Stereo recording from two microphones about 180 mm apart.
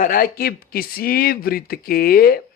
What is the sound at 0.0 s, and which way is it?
Speech, 50° left (ahead or behind).